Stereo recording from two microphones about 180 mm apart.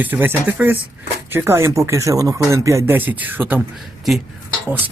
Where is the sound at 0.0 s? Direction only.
10° right (ahead or behind).